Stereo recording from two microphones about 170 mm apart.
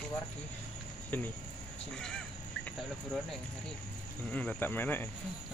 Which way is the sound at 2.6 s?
5° left (ahead or behind).